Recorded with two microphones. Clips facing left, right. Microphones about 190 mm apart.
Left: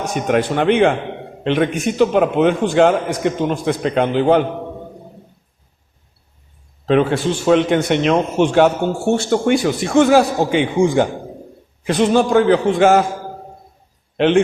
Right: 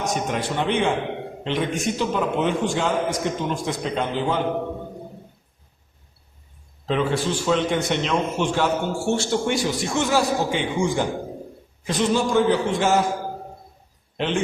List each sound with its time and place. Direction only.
0.0 s a man's voice: 65° left (ahead or behind)
6.8 s a man's voice: 60° left (ahead or behind)
14.2 s a man's voice: 65° left (ahead or behind)